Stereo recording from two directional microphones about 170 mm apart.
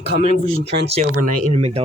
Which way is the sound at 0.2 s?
35° right (ahead or behind).